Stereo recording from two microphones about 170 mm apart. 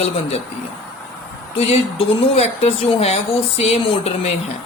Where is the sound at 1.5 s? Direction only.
35° left (ahead or behind).